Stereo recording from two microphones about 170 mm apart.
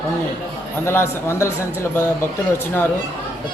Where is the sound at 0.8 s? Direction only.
15° left (ahead or behind).